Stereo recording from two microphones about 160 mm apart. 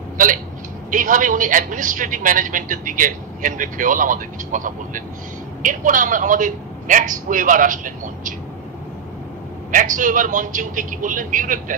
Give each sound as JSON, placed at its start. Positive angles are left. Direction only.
{"t": 0.8, "sound": "a man's voice", "side_deg": -55}
{"t": 9.7, "sound": "a man's voice", "side_deg": -55}